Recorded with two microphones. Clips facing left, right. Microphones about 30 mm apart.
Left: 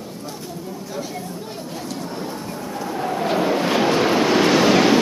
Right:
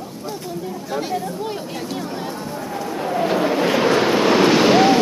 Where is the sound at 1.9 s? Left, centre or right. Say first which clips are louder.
Even; right.